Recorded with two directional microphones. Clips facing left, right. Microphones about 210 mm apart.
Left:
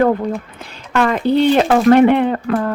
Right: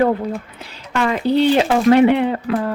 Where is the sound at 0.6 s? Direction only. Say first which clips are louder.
Left 4 dB; 50° left (ahead or behind).